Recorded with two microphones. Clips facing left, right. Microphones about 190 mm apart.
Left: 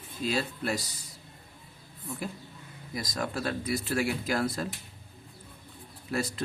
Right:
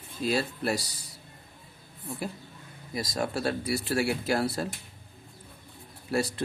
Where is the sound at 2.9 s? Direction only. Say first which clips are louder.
Right 3 dB; 30° right (ahead or behind).